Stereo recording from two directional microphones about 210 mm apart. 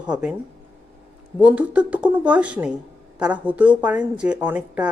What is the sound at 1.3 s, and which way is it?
Speech, 5° right (ahead or behind).